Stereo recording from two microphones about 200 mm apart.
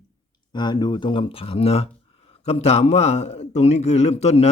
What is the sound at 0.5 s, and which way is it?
A man's voice, 20° left (ahead or behind).